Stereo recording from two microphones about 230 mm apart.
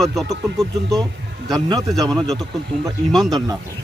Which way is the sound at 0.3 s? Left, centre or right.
Centre.